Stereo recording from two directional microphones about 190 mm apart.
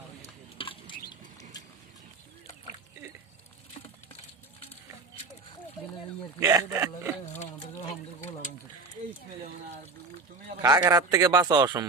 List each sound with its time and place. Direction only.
0.2 s a sound: 30° left (ahead or behind)
1.1 s rodents: 20° left (ahead or behind)
6.4 s speech: 15° right (ahead or behind)
10.6 s a man's voice: 20° right (ahead or behind)